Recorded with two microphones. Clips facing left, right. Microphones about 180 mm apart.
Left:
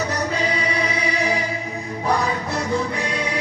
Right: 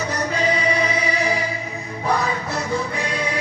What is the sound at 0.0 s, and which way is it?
Music, 10° left (ahead or behind).